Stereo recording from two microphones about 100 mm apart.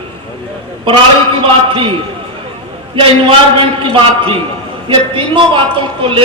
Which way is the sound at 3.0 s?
65° right (ahead or behind).